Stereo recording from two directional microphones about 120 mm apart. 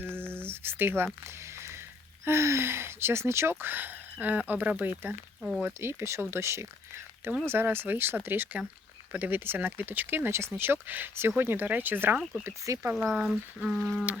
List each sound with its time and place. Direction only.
0.0 s a sound: 20° right (ahead or behind)
2.2 s speech: 20° right (ahead or behind)
5.4 s speech: centre (ahead or behind)
5.6 s speech: 20° right (ahead or behind)
12.9 s speech: 10° right (ahead or behind)